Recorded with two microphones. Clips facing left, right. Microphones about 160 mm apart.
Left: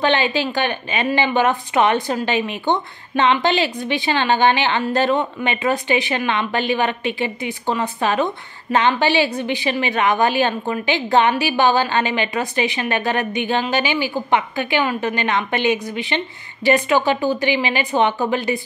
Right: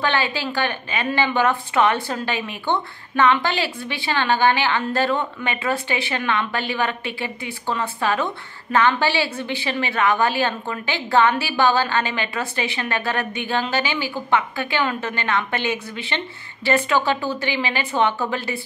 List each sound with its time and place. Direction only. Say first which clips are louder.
0.0 s a woman's voice: left 4 dB; 20° left (ahead or behind)